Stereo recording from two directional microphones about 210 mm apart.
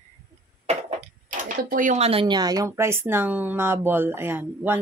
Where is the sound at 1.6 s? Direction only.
40° right (ahead or behind).